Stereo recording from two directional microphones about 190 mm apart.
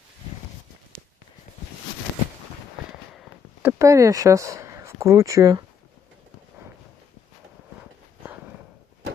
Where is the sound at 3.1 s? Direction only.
10° right (ahead or behind).